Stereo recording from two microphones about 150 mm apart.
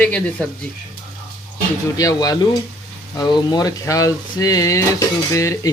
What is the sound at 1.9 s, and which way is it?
Speech, 25° left (ahead or behind).